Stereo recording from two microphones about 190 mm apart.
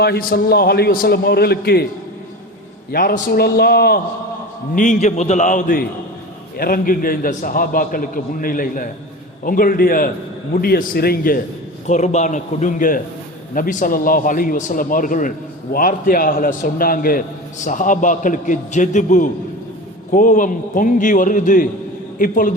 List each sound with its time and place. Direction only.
0.0 s a man's voice: 55° left (ahead or behind)
2.9 s a man's voice: 50° left (ahead or behind)
4.7 s a man's voice: 40° left (ahead or behind)
11.9 s a man's voice: 40° left (ahead or behind)